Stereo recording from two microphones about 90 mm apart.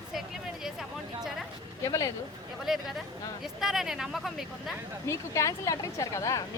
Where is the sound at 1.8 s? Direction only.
40° left (ahead or behind).